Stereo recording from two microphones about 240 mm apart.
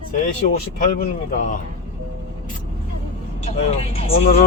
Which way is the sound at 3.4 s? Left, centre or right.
Left.